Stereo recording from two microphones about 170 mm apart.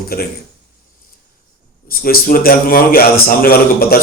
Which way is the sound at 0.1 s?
60° left (ahead or behind).